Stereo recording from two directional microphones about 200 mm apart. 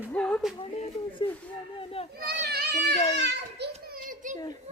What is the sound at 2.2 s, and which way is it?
Children playing, 55° right (ahead or behind).